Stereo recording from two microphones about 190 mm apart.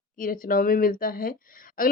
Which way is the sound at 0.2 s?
45° left (ahead or behind).